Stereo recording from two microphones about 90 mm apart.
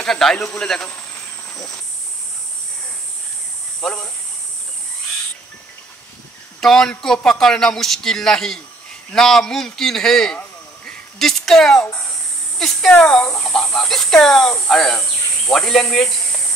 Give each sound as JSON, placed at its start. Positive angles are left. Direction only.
{"t": 0.0, "sound": "speech", "side_deg": 5}
{"t": 3.8, "sound": "speech", "side_deg": 10}
{"t": 6.6, "sound": "a man's voice", "side_deg": 5}
{"t": 10.9, "sound": "a sound", "side_deg": 5}
{"t": 12.5, "sound": "a man's voice", "side_deg": 5}